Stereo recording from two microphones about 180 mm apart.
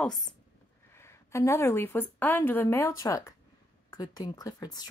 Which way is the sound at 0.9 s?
15° left (ahead or behind).